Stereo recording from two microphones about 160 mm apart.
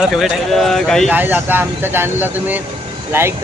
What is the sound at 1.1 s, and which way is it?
Speech, 10° right (ahead or behind).